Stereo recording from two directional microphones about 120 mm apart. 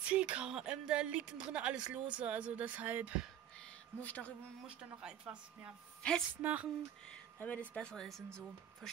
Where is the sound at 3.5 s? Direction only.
10° left (ahead or behind).